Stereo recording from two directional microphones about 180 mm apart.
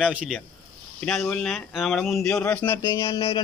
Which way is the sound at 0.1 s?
5° right (ahead or behind).